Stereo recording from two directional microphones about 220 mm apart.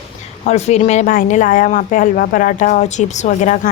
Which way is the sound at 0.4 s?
30° left (ahead or behind).